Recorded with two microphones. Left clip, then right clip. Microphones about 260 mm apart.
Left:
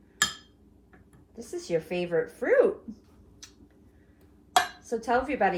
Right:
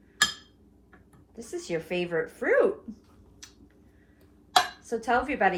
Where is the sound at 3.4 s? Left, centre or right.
Right.